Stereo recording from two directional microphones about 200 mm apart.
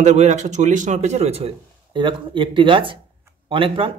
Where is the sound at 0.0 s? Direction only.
35° right (ahead or behind).